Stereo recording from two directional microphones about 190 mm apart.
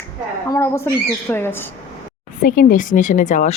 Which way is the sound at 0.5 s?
15° left (ahead or behind).